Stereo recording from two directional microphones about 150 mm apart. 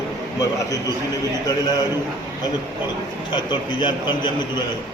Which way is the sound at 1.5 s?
25° left (ahead or behind).